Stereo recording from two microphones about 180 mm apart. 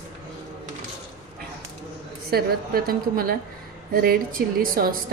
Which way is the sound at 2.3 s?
60° right (ahead or behind).